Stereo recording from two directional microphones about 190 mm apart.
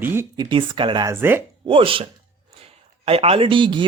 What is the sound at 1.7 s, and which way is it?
Speech, 30° right (ahead or behind).